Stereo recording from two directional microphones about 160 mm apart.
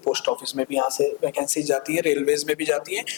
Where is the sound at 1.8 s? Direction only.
10° left (ahead or behind).